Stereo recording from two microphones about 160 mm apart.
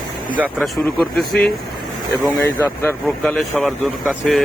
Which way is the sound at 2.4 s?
15° left (ahead or behind).